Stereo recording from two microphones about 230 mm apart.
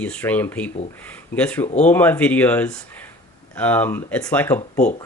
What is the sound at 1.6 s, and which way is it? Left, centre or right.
Speech, left.